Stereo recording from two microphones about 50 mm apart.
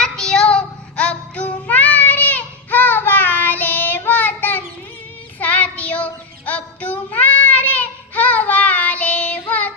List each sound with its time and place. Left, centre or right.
0.0 s child singing: centre
0.4 s child singing: left